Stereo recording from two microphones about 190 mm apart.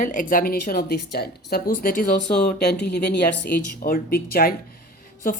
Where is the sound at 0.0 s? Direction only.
45° left (ahead or behind).